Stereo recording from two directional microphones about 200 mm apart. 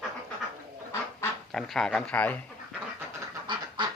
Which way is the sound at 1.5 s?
Centre (ahead or behind).